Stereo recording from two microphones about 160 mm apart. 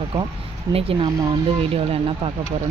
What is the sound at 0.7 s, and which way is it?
Speech, 35° right (ahead or behind).